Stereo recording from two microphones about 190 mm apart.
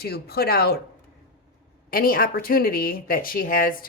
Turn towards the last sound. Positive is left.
turn(degrees=50)  # may be behind; listen again after turning